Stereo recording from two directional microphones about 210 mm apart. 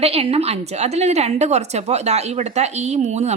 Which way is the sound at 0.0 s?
30° right (ahead or behind).